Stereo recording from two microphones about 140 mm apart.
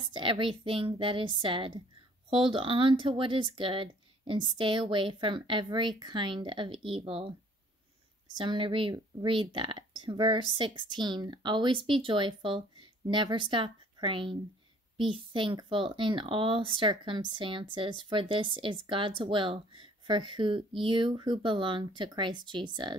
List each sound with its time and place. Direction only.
0.1 s speech: 35° right (ahead or behind)
8.4 s speech: 35° right (ahead or behind)